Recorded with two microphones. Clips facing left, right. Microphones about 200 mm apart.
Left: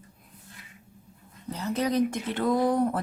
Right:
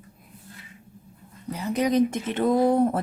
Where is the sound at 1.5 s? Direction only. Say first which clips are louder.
Right 4 dB; 15° right (ahead or behind).